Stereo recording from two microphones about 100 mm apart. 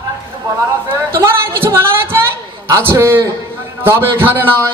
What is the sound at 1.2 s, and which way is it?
A man's voice, 25° right (ahead or behind).